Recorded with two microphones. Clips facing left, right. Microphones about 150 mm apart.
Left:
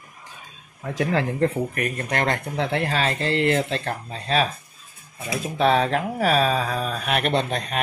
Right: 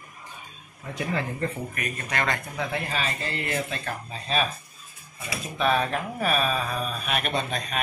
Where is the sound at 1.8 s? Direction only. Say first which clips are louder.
Left 2 dB; 55° left (ahead or behind).